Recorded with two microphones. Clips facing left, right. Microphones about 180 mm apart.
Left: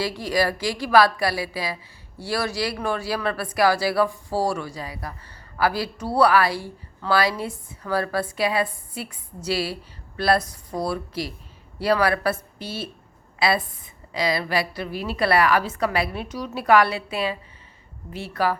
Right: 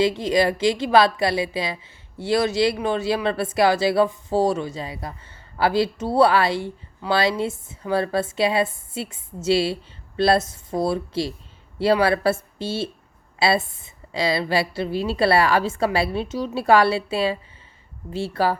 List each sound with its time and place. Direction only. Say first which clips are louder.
0.0 s a woman's voice: right 4 dB; 20° right (ahead or behind)